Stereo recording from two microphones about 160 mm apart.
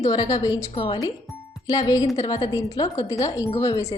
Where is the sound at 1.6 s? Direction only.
25° left (ahead or behind).